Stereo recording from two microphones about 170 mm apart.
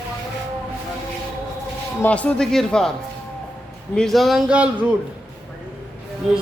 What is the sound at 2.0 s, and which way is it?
Speech, 10° left (ahead or behind).